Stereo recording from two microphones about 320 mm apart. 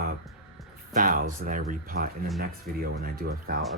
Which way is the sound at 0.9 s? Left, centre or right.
Right.